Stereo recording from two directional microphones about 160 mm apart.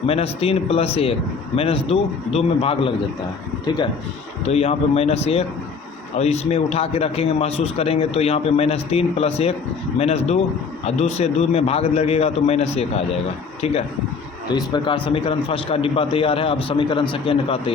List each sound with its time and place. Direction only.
0.0 s a man's voice: 40° left (ahead or behind)
4.4 s a man's voice: 40° left (ahead or behind)
14.5 s a man's voice: 30° left (ahead or behind)